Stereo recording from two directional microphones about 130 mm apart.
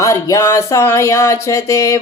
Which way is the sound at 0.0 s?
25° left (ahead or behind).